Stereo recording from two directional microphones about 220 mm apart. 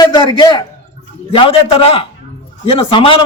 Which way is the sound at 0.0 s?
20° left (ahead or behind).